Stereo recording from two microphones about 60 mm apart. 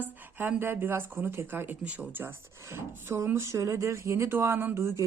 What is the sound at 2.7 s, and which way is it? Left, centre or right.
Speech, right.